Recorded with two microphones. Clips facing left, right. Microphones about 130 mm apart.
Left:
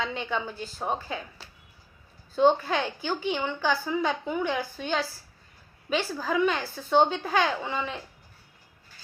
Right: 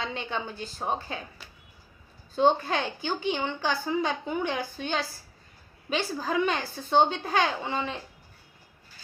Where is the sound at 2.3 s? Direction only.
20° right (ahead or behind).